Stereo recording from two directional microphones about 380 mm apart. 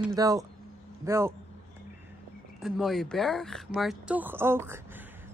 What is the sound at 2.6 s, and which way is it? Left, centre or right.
Speech, centre.